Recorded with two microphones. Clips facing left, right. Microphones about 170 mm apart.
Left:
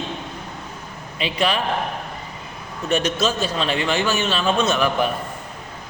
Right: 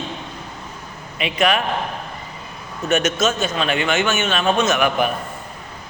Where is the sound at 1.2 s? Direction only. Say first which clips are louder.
Right 3 dB; 30° left (ahead or behind).